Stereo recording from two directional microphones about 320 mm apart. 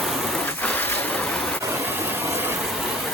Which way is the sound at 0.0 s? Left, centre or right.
Centre.